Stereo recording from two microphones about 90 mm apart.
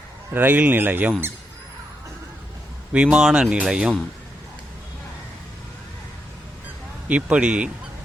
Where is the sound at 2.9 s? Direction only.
10° right (ahead or behind).